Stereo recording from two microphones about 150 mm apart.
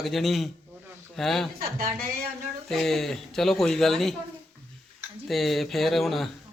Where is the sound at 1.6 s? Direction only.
75° right (ahead or behind).